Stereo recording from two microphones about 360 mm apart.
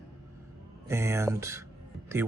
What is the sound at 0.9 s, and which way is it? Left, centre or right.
Speech, centre.